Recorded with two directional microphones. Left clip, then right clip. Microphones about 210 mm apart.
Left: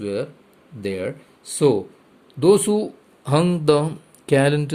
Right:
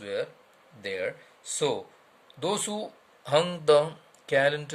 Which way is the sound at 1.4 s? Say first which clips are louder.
Left 10 dB; 25° left (ahead or behind).